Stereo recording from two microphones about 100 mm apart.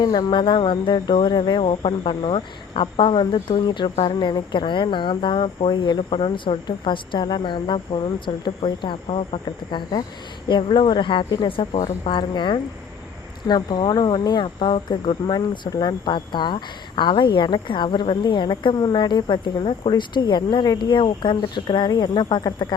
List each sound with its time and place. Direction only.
0.0 s speech: 45° left (ahead or behind); by 9.8 s 70° left (ahead or behind)
10.5 s speech: 55° left (ahead or behind)